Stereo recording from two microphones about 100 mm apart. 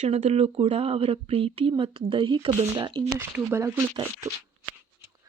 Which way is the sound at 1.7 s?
60° right (ahead or behind).